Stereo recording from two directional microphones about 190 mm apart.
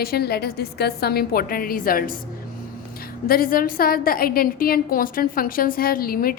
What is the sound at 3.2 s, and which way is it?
A woman's voice, 50° left (ahead or behind).